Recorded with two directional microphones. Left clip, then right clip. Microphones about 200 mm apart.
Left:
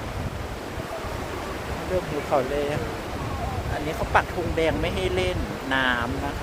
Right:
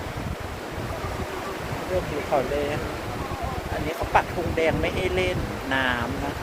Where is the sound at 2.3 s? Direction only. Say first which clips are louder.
Left 1 dB; 15° left (ahead or behind).